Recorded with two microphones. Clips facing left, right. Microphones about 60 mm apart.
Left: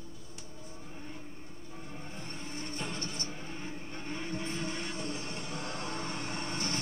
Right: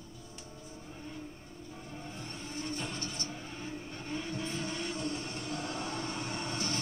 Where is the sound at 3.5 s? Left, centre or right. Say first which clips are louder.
Even; left.